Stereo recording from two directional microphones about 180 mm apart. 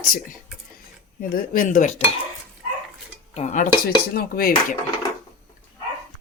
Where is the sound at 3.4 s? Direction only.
40° left (ahead or behind).